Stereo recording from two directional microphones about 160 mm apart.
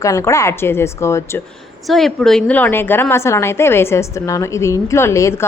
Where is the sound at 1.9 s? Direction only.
Centre (ahead or behind).